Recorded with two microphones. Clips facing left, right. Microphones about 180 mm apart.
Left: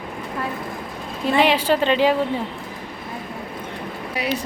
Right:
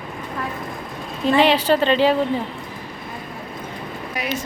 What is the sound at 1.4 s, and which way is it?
Speech, 10° left (ahead or behind).